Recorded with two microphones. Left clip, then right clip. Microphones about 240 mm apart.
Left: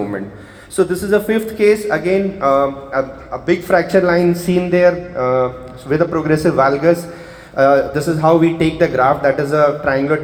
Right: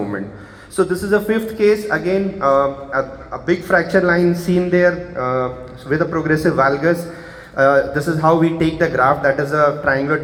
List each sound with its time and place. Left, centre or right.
0.8 s a man's voice: left